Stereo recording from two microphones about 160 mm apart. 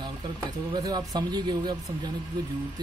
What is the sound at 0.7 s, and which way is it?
Speech, 25° right (ahead or behind).